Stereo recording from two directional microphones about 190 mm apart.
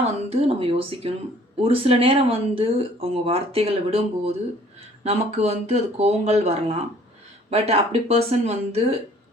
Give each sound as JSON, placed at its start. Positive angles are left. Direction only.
{"t": 0.0, "sound": "speech", "side_deg": -35}